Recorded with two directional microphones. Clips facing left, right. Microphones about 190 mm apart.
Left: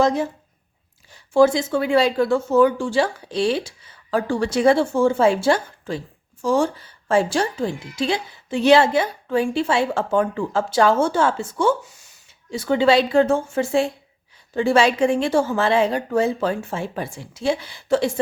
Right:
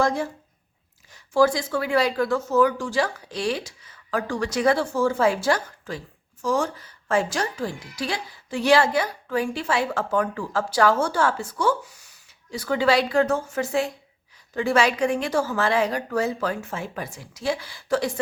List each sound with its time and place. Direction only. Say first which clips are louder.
0.0 s a woman's voice: left 4 dB; 20° left (ahead or behind)